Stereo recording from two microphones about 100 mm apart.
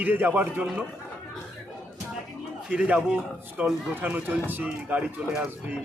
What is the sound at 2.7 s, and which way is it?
Speech, 15° right (ahead or behind).